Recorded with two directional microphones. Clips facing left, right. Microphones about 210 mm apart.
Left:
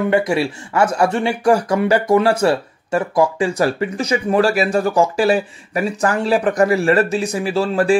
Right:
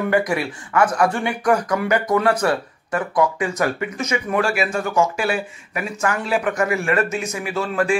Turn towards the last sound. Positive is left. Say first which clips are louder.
# left 5 dB
turn(degrees=35)  # may be behind; listen again after turning